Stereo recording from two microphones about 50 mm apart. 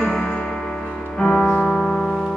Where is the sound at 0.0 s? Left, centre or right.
Centre.